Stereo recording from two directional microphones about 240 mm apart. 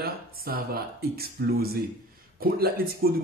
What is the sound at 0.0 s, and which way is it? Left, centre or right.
Speech, right.